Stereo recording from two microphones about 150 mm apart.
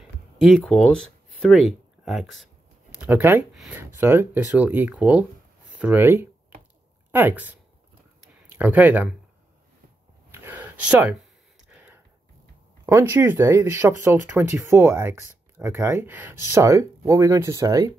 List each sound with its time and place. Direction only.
0.4 s speech: centre (ahead or behind)
3.0 s speech: 15° right (ahead or behind)
10.4 s a sound: 10° right (ahead or behind)
12.8 s speech: 15° right (ahead or behind)